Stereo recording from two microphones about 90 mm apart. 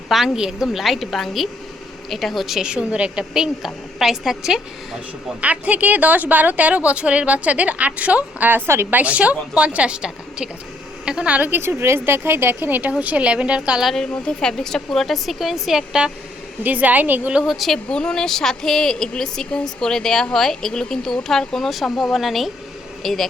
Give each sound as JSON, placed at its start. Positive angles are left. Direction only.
{"t": 0.1, "sound": "speech", "side_deg": -5}
{"t": 5.4, "sound": "speech", "side_deg": -15}
{"t": 9.0, "sound": "a woman's voice", "side_deg": -15}
{"t": 13.8, "sound": "speech", "side_deg": 5}
{"t": 16.6, "sound": "a woman's voice", "side_deg": -20}
{"t": 17.4, "sound": "speech", "side_deg": -5}
{"t": 17.8, "sound": "speech", "side_deg": 10}